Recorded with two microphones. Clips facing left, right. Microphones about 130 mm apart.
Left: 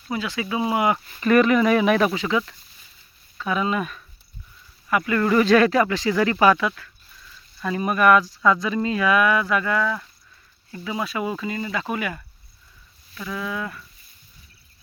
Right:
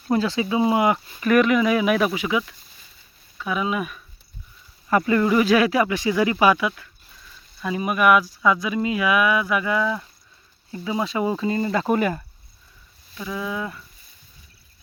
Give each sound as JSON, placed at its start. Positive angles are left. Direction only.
{"t": 0.1, "sound": "speech", "side_deg": -30}
{"t": 1.1, "sound": "speech", "side_deg": -5}
{"t": 4.9, "sound": "speech", "side_deg": -30}
{"t": 5.2, "sound": "speech", "side_deg": -10}
{"t": 13.1, "sound": "speech", "side_deg": -20}